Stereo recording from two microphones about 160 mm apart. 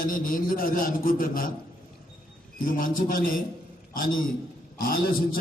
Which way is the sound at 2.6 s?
60° left (ahead or behind).